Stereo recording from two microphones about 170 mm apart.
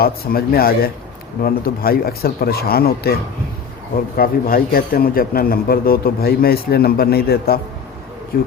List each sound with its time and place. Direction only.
0.0 s a man's voice: 65° left (ahead or behind)
4.2 s a man's voice: 60° left (ahead or behind)